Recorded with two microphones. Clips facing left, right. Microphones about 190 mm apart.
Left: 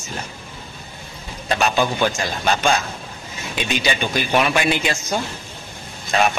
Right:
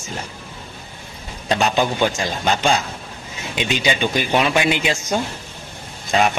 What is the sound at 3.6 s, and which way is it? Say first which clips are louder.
Speech: right 2 dB; 20° right (ahead or behind).